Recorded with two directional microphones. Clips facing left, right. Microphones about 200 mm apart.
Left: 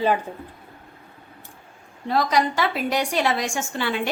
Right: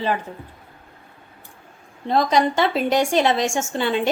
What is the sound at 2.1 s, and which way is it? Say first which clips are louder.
A woman's voice: right 3 dB; 25° right (ahead or behind).